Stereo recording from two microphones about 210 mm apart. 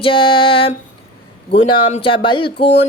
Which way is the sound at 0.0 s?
25° left (ahead or behind).